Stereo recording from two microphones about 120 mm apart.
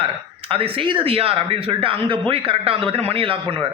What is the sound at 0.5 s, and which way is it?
Speech, 50° right (ahead or behind).